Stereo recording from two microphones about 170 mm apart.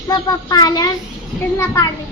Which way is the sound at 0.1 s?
25° left (ahead or behind).